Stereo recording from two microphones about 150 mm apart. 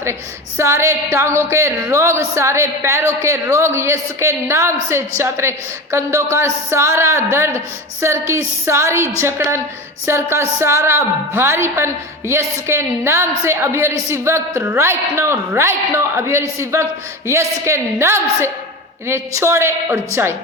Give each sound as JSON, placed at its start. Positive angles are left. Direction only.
{"t": 0.0, "sound": "a woman's voice", "side_deg": -15}